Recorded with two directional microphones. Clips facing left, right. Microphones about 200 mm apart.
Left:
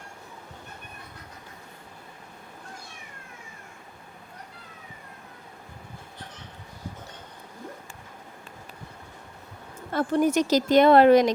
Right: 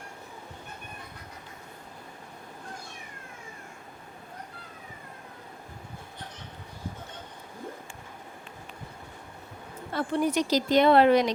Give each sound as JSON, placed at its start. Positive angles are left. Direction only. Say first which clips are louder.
{"t": 9.9, "sound": "speech", "louder": "left 4 dB", "side_deg": 45}